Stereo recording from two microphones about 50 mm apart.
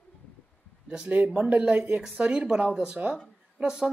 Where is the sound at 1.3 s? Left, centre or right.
Right.